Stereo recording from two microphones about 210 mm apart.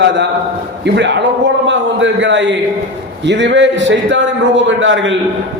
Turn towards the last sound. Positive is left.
turn(degrees=-65)  # may be behind; listen again after turning